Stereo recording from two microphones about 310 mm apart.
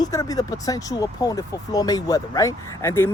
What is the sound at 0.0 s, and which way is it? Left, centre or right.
Speech, centre.